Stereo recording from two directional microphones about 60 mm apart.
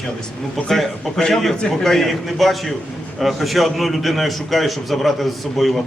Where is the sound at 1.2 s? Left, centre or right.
Centre.